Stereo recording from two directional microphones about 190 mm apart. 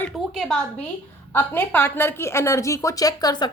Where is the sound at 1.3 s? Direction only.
10° left (ahead or behind).